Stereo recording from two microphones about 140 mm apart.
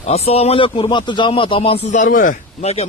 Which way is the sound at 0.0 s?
50° left (ahead or behind).